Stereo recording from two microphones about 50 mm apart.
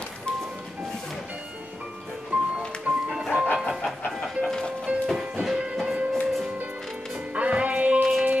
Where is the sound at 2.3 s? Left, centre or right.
Right.